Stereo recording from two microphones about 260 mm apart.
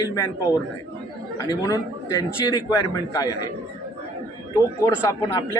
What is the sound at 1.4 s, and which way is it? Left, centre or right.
Speech, centre.